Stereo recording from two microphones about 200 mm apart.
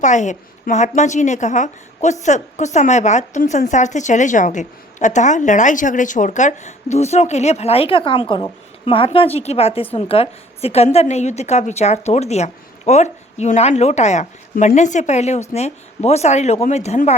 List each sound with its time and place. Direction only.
0.0 s a woman's voice: 35° left (ahead or behind)